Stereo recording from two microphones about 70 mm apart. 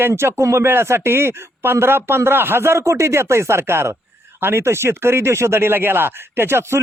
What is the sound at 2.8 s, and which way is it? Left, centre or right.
Speech, right.